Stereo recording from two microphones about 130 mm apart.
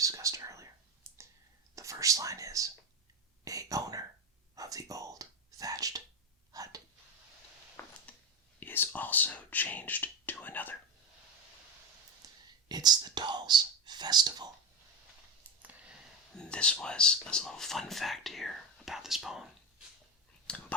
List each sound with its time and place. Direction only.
0.0 s whispering: 25° right (ahead or behind)
1.0 s clicking: 20° right (ahead or behind)
1.7 s whispering: 25° right (ahead or behind)
3.4 s a sound: 25° right (ahead or behind)
4.5 s whispering: 25° right (ahead or behind)
6.5 s a sound: 30° right (ahead or behind)
7.8 s a sound: 15° left (ahead or behind)
8.6 s speech: 15° left (ahead or behind)
12.2 s speech: 30° right (ahead or behind)
15.6 s a sound: 10° right (ahead or behind)
16.4 s speech: 10° left (ahead or behind)
20.5 s speech: 5° left (ahead or behind)